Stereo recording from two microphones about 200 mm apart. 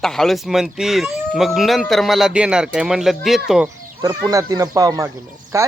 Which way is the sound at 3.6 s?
15° right (ahead or behind).